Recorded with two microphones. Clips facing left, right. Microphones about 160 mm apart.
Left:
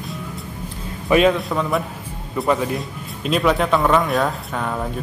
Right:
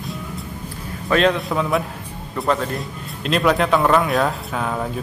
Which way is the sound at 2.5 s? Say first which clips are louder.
Left 1 dB; 10° left (ahead or behind).